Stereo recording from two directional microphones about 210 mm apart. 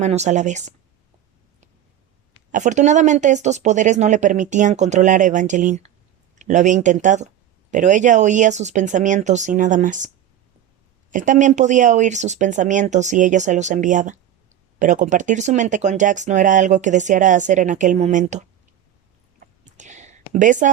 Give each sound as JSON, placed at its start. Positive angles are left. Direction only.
{"t": 0.0, "sound": "speech", "side_deg": -35}
{"t": 2.5, "sound": "speech", "side_deg": -35}
{"t": 11.1, "sound": "speech", "side_deg": -35}
{"t": 19.4, "sound": "a sound", "side_deg": -35}